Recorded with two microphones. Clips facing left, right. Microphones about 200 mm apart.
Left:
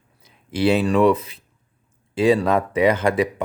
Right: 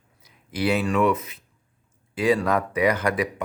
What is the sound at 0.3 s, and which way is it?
Speech, 25° left (ahead or behind).